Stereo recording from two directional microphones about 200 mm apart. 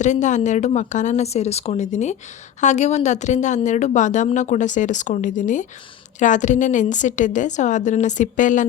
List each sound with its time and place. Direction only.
0.0 s a woman's voice: 35° left (ahead or behind)